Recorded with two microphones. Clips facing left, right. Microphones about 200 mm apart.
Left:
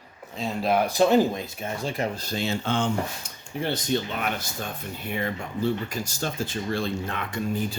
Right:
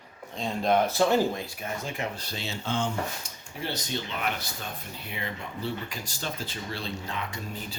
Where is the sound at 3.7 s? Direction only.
50° left (ahead or behind).